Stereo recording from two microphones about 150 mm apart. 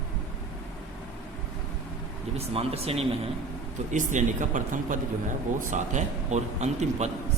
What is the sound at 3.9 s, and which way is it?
A man's voice, 55° right (ahead or behind).